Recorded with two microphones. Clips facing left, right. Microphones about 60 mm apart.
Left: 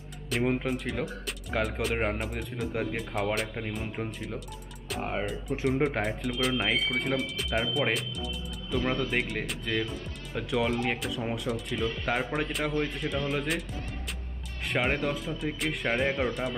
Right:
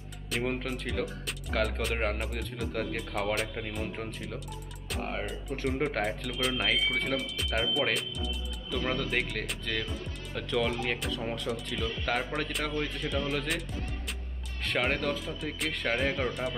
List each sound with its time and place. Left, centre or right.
0.3 s speech: centre
2.7 s speech: centre